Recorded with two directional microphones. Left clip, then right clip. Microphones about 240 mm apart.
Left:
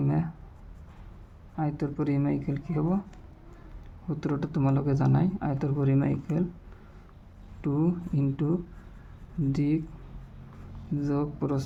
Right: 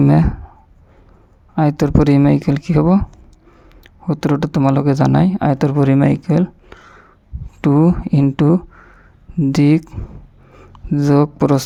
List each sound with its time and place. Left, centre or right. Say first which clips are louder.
0.0 s speech: right 16 dB; right
1.5 s speech: right 16 dB; right
7.6 s speech: right 15 dB; right
10.9 s speech: right 16 dB; right